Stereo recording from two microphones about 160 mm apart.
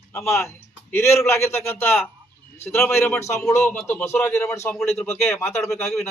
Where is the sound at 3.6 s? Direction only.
5° left (ahead or behind).